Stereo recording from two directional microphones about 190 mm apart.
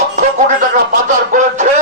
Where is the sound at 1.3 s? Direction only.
40° right (ahead or behind).